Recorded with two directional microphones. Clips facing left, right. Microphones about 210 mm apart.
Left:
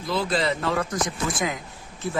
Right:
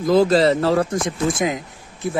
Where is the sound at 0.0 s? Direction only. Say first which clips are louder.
Right 10 dB; 45° right (ahead or behind).